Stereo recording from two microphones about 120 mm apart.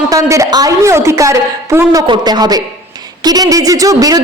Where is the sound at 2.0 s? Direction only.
40° right (ahead or behind).